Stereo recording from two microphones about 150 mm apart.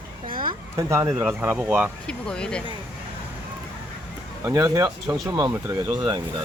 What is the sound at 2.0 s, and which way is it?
Speech, 5° left (ahead or behind).